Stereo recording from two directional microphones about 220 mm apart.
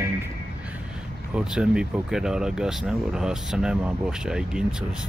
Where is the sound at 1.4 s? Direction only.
5° right (ahead or behind).